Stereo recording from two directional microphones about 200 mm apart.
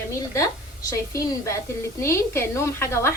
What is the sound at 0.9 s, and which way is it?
A woman's voice, 15° left (ahead or behind).